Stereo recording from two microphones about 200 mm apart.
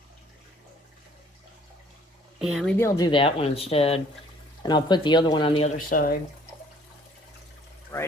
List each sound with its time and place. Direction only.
2.4 s speech: centre (ahead or behind)
2.7 s speech: 15° left (ahead or behind); by 6.1 s 45° left (ahead or behind)
7.9 s speech: 10° left (ahead or behind)